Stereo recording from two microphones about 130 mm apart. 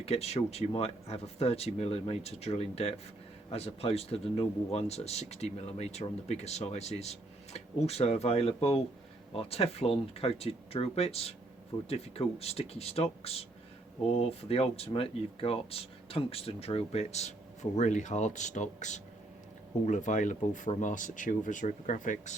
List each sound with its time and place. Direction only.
0.0 s speech: 55° left (ahead or behind); by 22.4 s 80° left